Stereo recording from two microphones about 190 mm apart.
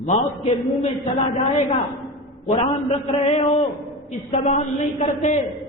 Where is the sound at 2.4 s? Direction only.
30° left (ahead or behind).